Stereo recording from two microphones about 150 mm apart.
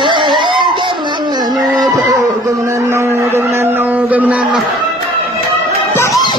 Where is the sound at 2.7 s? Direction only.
15° right (ahead or behind).